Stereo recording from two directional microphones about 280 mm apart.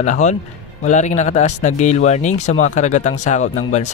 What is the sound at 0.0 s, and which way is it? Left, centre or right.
Speech, left.